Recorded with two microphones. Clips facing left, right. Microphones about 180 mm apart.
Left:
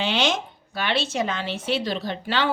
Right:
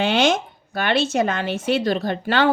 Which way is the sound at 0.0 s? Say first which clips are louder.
Right 5 dB; 50° right (ahead or behind).